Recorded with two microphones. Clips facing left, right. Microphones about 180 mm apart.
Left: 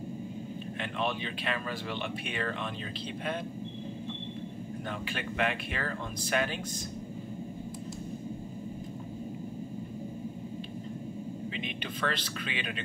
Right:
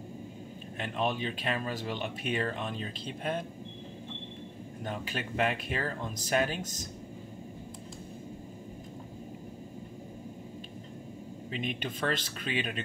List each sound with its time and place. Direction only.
0.9 s speech: 40° right (ahead or behind)
4.8 s speech: 40° right (ahead or behind)
11.5 s speech: 45° right (ahead or behind)